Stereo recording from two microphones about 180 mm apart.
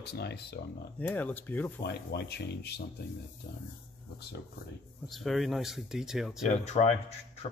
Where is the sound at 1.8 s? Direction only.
65° left (ahead or behind).